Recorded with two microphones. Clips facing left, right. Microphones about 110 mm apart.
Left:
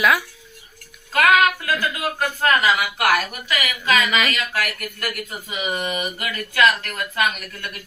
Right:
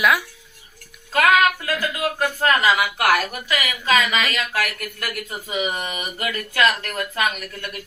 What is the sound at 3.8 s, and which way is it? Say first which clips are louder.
Speech: even; 35° right (ahead or behind).